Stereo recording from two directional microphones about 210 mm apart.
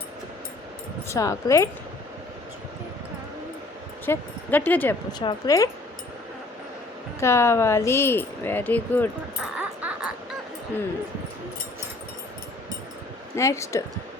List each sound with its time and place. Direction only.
1.0 s speech: 15° left (ahead or behind)
4.0 s speech: 10° left (ahead or behind)
7.2 s speech: 15° left (ahead or behind)
9.4 s music: 5° right (ahead or behind)
13.3 s speech: 15° left (ahead or behind)